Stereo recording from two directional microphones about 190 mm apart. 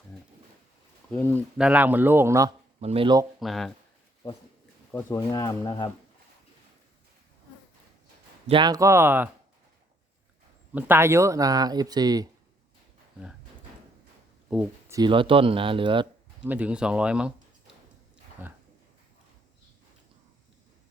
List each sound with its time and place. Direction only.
1.1 s speech: 10° left (ahead or behind)
1.5 s a man's voice: 5° right (ahead or behind)
2.8 s speech: 30° right (ahead or behind)
3.4 s speech: centre (ahead or behind)
4.9 s speech: 15° left (ahead or behind)
8.4 s a man's voice: 25° right (ahead or behind)
10.8 s speech: 10° right (ahead or behind)
14.5 s speech: 5° right (ahead or behind)
14.9 s speech: 25° right (ahead or behind)
16.4 s speech: 5° right (ahead or behind)
18.4 s a man's voice: 10° right (ahead or behind)